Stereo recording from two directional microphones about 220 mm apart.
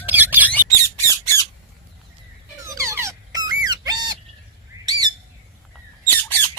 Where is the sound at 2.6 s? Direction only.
15° right (ahead or behind).